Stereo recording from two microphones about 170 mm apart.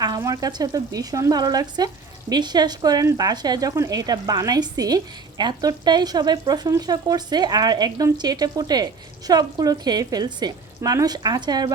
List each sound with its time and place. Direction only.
0.0 s speech: 20° right (ahead or behind)